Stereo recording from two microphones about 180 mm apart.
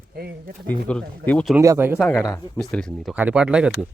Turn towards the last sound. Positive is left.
turn(degrees=-5)  # may be behind; listen again after turning